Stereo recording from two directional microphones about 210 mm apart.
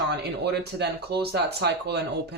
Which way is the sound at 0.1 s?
50° right (ahead or behind).